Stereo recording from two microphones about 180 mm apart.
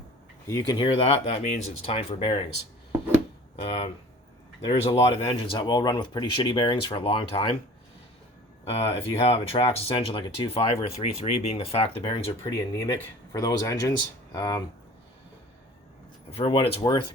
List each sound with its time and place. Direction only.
0.4 s speech: 20° left (ahead or behind)
3.5 s speech: 30° left (ahead or behind)
8.7 s speech: 35° left (ahead or behind)
12.4 s speech: 15° left (ahead or behind)
16.3 s speech: 35° left (ahead or behind)